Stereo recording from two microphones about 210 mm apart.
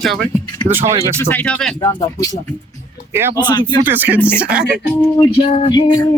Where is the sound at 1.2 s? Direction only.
10° left (ahead or behind).